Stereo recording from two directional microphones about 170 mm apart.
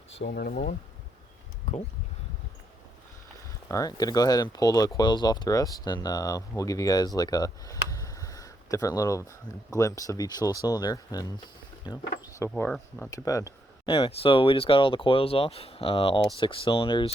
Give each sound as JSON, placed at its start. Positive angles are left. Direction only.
{"t": 0.2, "sound": "speech", "side_deg": 65}
{"t": 0.5, "sound": "speech", "side_deg": 45}
{"t": 1.7, "sound": "a sound", "side_deg": 45}
{"t": 3.7, "sound": "speech", "side_deg": 20}
{"t": 12.5, "sound": "speech", "side_deg": 10}
{"t": 13.8, "sound": "speech", "side_deg": 30}